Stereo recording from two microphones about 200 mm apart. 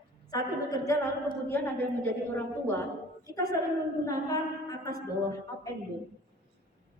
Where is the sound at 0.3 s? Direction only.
20° left (ahead or behind).